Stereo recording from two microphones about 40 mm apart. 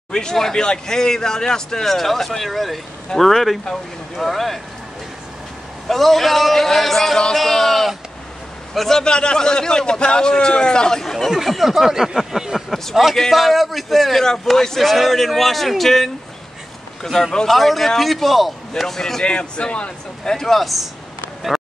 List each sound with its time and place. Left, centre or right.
0.1 s a man's voice: centre
5.9 s a man's voice: centre
7.3 s a sound: centre
8.7 s speech: centre
9.0 s a man's voice: left
11.2 s speech: centre
12.6 s a man's voice: centre
19.2 s a man's voice: left
20.3 s a man's voice: centre